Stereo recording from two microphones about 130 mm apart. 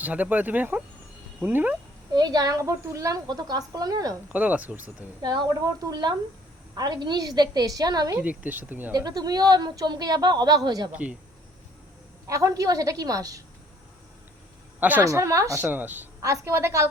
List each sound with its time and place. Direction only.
0.0 s speech: 10° right (ahead or behind)
2.1 s speech: 30° right (ahead or behind)
4.3 s speech: 10° right (ahead or behind)
5.2 s a woman's voice: 35° right (ahead or behind)
8.2 s speech: 10° right (ahead or behind)
8.9 s a woman's voice: 30° right (ahead or behind)
10.9 s speech: 10° right (ahead or behind)
12.3 s speech: 25° right (ahead or behind)
14.8 s speech: 15° right (ahead or behind)
15.0 s speech: 25° right (ahead or behind)